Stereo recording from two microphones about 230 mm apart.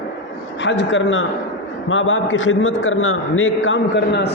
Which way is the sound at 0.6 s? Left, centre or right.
Left.